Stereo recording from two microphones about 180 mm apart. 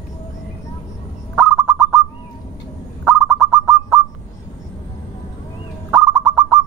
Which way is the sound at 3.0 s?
Centre (ahead or behind).